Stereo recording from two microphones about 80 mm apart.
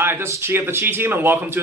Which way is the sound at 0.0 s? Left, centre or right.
Right.